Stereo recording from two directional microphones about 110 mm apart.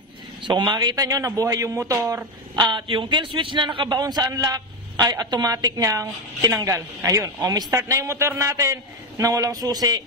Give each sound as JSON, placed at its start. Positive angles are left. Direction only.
{"t": 0.4, "sound": "a man's voice", "side_deg": -45}
{"t": 2.5, "sound": "a man's voice", "side_deg": -45}